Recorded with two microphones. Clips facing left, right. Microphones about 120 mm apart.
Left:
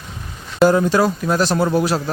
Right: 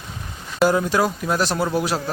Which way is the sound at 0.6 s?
10° right (ahead or behind).